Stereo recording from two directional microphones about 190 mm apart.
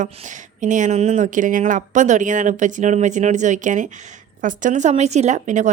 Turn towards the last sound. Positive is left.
turn(degrees=-40)  # may be behind; listen again after turning